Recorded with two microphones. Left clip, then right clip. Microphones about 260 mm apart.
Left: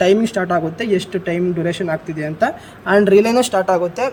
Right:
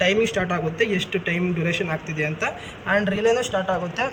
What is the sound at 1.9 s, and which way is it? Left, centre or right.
Speech, centre.